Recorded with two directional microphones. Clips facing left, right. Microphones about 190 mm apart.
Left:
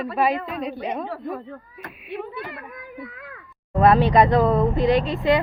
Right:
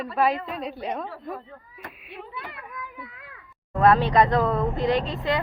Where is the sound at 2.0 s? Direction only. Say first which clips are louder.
Left 9 dB; 60° left (ahead or behind).